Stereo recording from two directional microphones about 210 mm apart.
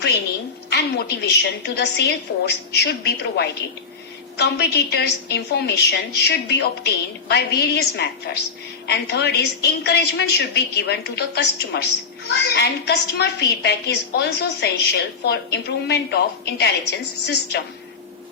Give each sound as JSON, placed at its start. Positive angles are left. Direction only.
{"t": 0.7, "sound": "a woman's voice", "side_deg": 50}